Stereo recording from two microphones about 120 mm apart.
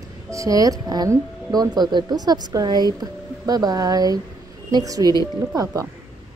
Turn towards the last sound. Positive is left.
turn(degrees=-30)  # may be behind; listen again after turning